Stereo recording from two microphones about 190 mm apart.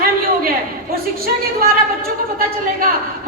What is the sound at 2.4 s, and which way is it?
Speech, 50° right (ahead or behind).